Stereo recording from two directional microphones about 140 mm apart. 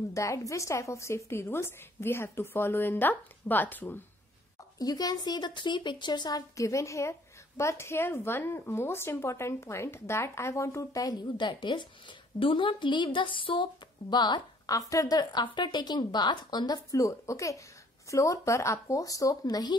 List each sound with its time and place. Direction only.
0.1 s a woman's voice: 20° left (ahead or behind)
4.7 s speech: 30° left (ahead or behind)